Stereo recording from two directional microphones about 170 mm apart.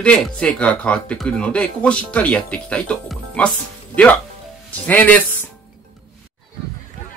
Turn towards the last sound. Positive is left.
turn(degrees=10)  # may be behind; listen again after turning